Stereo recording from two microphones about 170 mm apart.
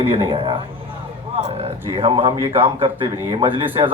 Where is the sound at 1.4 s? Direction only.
40° right (ahead or behind).